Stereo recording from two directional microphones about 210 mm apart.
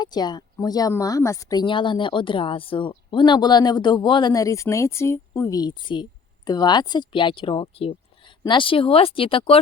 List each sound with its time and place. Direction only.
0.0 s speech: 20° left (ahead or behind)